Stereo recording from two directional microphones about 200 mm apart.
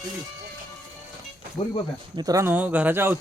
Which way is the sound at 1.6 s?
25° left (ahead or behind).